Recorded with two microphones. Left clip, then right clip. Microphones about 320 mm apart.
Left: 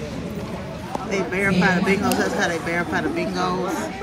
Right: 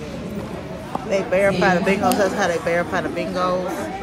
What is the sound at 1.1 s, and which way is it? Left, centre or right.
Speech, centre.